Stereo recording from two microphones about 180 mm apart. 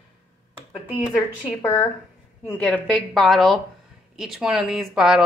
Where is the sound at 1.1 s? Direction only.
10° left (ahead or behind).